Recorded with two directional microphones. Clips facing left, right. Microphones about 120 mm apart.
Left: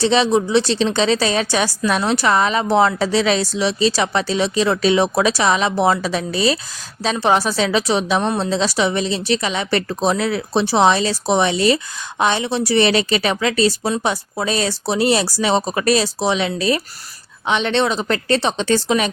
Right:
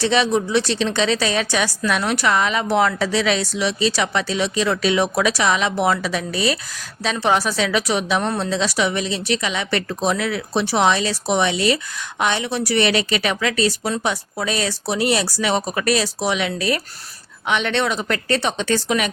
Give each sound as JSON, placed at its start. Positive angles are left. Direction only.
{"t": 0.0, "sound": "a woman's voice", "side_deg": 30}